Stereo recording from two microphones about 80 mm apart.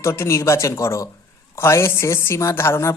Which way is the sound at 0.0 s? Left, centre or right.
Left.